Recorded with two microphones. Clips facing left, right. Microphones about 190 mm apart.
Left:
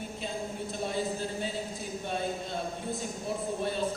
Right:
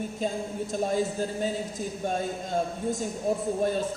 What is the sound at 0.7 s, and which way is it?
Speech, 45° right (ahead or behind).